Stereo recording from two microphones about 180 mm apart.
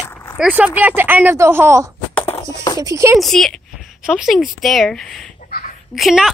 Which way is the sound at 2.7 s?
15° right (ahead or behind).